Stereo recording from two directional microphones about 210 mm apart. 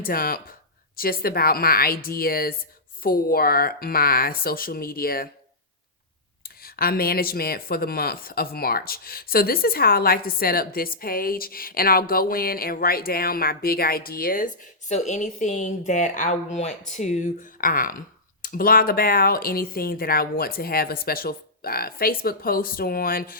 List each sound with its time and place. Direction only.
0.0 s speech: 45° left (ahead or behind)
6.4 s speech: 45° left (ahead or behind)